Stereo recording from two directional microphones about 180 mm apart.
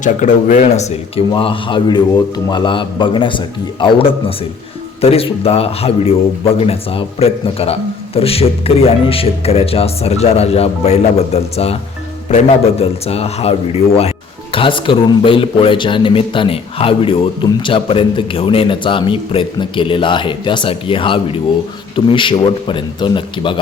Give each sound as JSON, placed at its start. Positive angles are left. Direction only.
{"t": 0.0, "sound": "speech", "side_deg": 45}
{"t": 12.8, "sound": "speech", "side_deg": 35}